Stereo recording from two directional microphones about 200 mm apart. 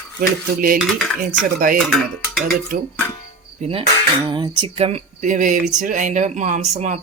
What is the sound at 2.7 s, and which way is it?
Speech, 45° right (ahead or behind).